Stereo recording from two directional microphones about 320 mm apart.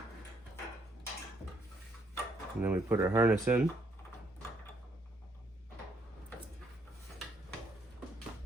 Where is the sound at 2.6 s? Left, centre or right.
Centre.